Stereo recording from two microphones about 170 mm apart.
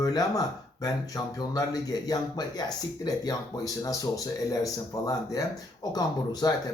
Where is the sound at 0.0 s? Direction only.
20° left (ahead or behind).